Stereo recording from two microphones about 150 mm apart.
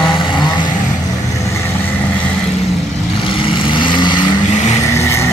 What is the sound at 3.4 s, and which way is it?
Vehicle, 35° left (ahead or behind).